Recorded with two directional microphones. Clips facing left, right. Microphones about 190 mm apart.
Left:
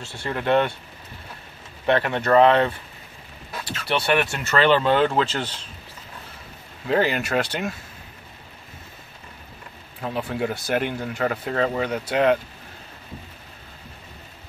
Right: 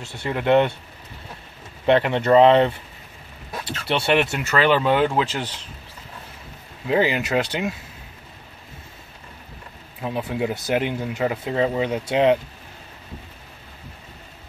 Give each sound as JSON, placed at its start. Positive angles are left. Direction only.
{"t": 0.0, "sound": "speech", "side_deg": -15}
{"t": 1.9, "sound": "speech", "side_deg": -20}
{"t": 4.3, "sound": "speech", "side_deg": -10}
{"t": 6.9, "sound": "speech", "side_deg": -15}
{"t": 10.0, "sound": "speech", "side_deg": -15}